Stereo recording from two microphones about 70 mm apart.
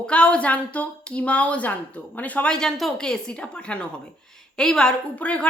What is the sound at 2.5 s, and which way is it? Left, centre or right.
A woman's voice, centre.